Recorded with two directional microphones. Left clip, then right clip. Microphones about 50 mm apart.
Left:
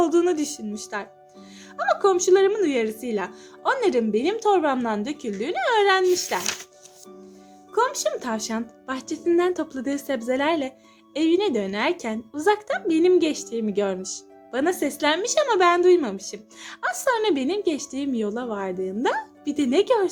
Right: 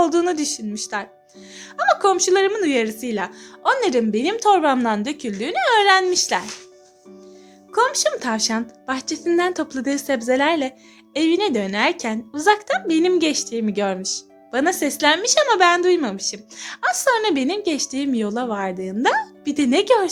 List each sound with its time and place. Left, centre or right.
0.0 s speech: centre
0.9 s speech: right
4.4 s speech: right
7.7 s speech: right